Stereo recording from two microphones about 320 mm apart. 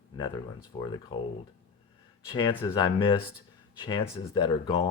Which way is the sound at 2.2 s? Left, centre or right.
Centre.